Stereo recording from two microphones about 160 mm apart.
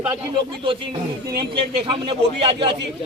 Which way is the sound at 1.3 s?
30° right (ahead or behind).